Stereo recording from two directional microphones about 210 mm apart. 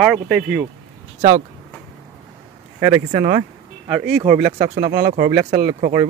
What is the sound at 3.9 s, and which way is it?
Speech, 5° right (ahead or behind).